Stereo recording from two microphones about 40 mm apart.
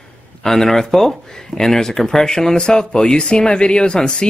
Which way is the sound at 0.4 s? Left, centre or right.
Centre.